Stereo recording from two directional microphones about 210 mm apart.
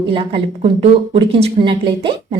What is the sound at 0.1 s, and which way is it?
Speech, 25° right (ahead or behind).